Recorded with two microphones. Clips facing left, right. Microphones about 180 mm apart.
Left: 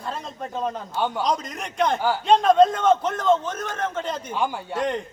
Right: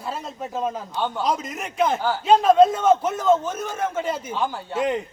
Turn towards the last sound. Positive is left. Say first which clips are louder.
# right 2 dB
turn(degrees=-5)  # may be behind; listen again after turning